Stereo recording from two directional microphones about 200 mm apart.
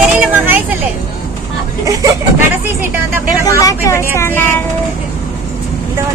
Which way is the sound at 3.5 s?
15° left (ahead or behind).